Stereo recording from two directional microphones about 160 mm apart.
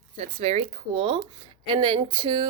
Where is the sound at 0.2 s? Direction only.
40° right (ahead or behind).